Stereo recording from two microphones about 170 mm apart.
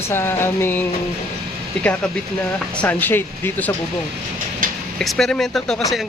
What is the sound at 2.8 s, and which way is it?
Speech, 10° left (ahead or behind).